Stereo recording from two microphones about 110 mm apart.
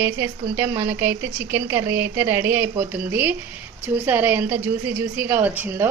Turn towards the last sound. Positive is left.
turn(degrees=-20)  # may be behind; listen again after turning